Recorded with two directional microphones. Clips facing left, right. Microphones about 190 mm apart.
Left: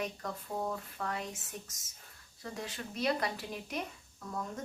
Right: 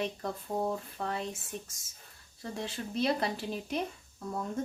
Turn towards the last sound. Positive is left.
turn(degrees=-30)  # may be behind; listen again after turning